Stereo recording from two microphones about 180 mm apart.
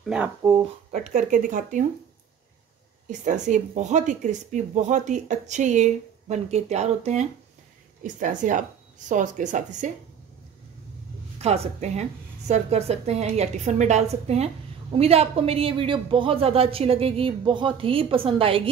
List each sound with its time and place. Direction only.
0.0 s speech: 5° right (ahead or behind)
0.4 s speech: 20° right (ahead or behind)
0.9 s speech: 45° right (ahead or behind)
3.1 s a woman's voice: 40° right (ahead or behind)
11.4 s a woman's voice: 35° right (ahead or behind)